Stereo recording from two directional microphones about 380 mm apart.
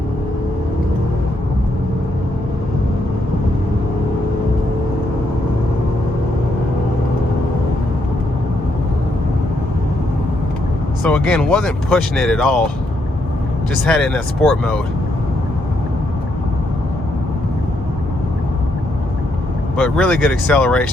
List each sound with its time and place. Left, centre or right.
11.0 s speech: centre
13.8 s speech: centre
19.7 s speech: centre